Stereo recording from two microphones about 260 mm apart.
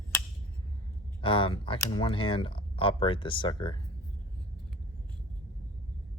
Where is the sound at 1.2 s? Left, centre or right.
Centre.